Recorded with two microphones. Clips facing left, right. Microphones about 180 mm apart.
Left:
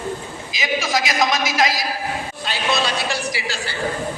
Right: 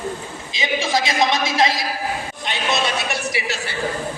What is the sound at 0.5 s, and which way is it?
A man's voice, 30° right (ahead or behind).